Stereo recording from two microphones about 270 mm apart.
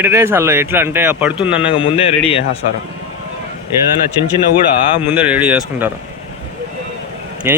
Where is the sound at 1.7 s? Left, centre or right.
Centre.